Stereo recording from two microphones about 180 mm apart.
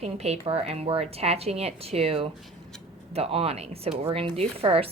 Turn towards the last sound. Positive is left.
turn(degrees=-30)  # may be behind; listen again after turning